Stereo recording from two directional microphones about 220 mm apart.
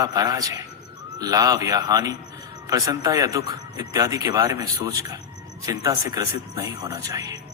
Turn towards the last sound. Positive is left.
turn(degrees=-15)  # may be behind; listen again after turning